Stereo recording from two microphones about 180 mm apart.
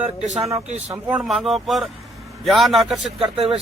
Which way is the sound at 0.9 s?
5° right (ahead or behind).